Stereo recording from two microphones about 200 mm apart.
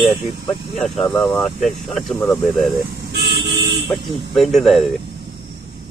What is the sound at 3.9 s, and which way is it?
Speech, centre (ahead or behind).